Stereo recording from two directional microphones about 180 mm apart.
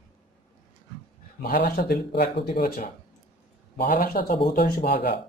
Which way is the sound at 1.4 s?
60° left (ahead or behind).